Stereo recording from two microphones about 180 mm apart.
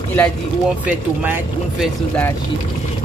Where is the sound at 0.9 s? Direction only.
10° right (ahead or behind).